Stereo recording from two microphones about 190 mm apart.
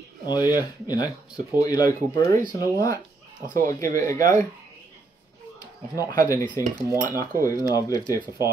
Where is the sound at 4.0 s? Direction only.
15° left (ahead or behind).